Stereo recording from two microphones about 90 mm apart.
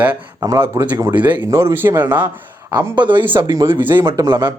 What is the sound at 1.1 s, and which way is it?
Speech, 15° right (ahead or behind).